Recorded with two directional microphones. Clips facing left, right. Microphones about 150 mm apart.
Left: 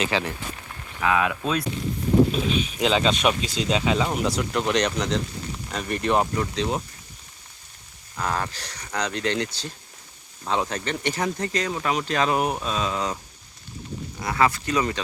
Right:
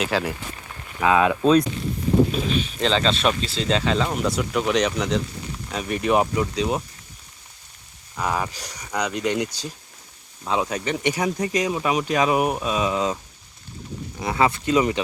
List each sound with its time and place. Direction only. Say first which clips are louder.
0.0 s speech: right 2 dB; 5° right (ahead or behind)
1.0 s speech: right 5 dB; 25° right (ahead or behind)
2.7 s speech: left 1 dB; 10° left (ahead or behind); by 6.8 s 10° right (ahead or behind)
8.1 s speech: right 2 dB; 10° right (ahead or behind)
12.7 s speech: right 4 dB; 15° right (ahead or behind)
14.2 s speech: right 1 dB; 20° right (ahead or behind)